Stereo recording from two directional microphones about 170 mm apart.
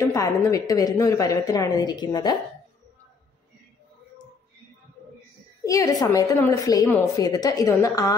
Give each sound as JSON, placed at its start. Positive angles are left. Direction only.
{"t": 0.0, "sound": "a woman's voice", "side_deg": 20}
{"t": 5.7, "sound": "a woman's voice", "side_deg": 20}